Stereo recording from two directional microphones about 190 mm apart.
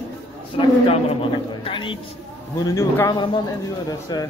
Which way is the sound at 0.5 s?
30° left (ahead or behind).